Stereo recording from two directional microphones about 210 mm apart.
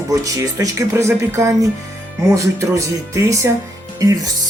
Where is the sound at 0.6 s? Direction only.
15° right (ahead or behind).